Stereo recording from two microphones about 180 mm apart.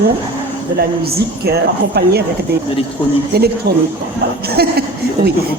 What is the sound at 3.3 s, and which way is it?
Speech, 60° right (ahead or behind).